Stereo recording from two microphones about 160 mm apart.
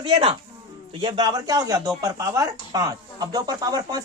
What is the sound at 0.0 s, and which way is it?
Speech, 35° right (ahead or behind).